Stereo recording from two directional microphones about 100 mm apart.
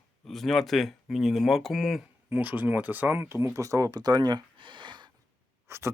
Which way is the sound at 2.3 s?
20° right (ahead or behind).